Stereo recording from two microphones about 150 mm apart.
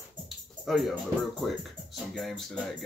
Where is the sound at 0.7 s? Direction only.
Centre (ahead or behind).